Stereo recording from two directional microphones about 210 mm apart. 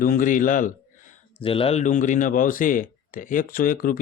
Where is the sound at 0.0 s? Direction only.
40° left (ahead or behind).